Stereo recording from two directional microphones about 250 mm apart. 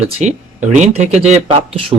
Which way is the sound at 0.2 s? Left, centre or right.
Right.